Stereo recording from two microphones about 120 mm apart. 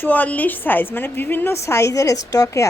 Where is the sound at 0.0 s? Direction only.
15° left (ahead or behind).